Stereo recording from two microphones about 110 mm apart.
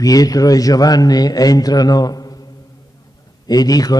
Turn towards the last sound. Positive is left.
turn(degrees=35)  # may be behind; listen again after turning